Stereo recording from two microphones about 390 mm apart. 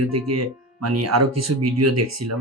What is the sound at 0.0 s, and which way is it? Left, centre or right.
Speech, right.